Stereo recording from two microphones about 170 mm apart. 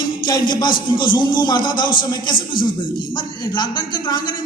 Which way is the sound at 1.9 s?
55° left (ahead or behind).